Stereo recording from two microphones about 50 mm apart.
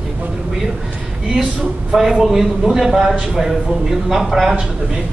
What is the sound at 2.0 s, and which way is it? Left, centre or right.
A man's voice, centre.